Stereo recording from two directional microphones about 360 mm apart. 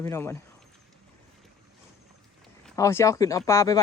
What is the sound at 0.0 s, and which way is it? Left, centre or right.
Speech, centre.